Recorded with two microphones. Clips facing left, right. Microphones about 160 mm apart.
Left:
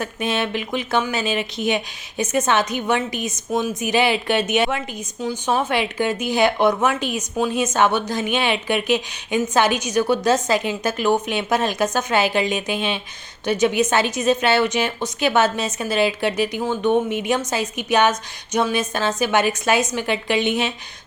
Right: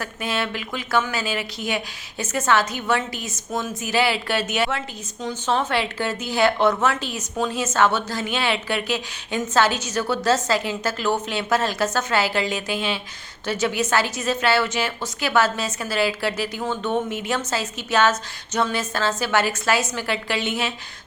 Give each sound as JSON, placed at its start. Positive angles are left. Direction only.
{"t": 0.0, "sound": "a woman's voice", "side_deg": 20}